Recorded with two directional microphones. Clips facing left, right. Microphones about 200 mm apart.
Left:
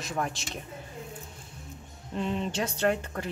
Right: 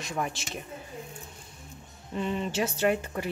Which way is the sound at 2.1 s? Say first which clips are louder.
Right 1 dB; 5° right (ahead or behind).